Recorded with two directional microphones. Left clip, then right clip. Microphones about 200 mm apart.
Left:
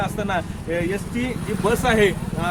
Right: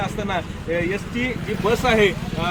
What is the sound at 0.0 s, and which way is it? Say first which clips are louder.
Speech: left 1 dB; 15° left (ahead or behind).